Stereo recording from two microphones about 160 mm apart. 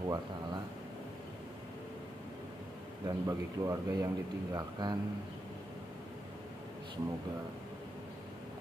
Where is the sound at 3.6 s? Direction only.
15° right (ahead or behind).